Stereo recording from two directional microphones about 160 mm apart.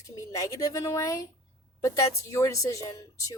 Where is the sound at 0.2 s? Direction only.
20° left (ahead or behind).